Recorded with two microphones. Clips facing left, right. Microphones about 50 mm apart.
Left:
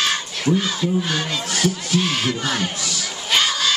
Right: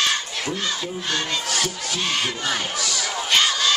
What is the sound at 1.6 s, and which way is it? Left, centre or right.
Crowd, centre.